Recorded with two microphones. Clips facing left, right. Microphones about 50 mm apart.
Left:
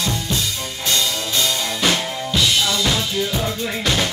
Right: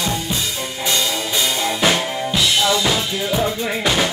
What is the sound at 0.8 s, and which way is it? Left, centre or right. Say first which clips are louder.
Music: right 1 dB; centre.